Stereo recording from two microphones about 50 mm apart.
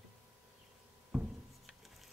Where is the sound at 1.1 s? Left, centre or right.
Centre.